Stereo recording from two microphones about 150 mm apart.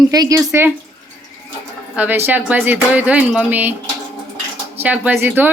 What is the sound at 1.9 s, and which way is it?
Speech, 10° right (ahead or behind).